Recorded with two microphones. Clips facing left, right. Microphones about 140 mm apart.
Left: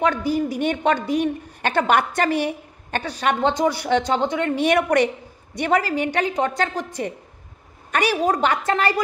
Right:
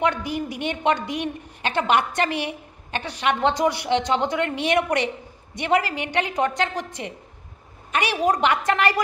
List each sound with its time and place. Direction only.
0.0 s a woman's voice: 35° left (ahead or behind)
4.6 s a woman's voice: 40° left (ahead or behind)
7.9 s a woman's voice: 40° left (ahead or behind)
8.2 s a woman's voice: 30° left (ahead or behind)